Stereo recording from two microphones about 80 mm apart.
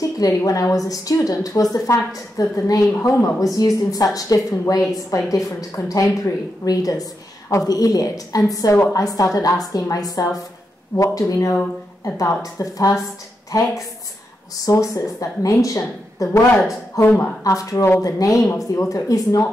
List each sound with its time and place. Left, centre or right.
0.0 s a woman's voice: left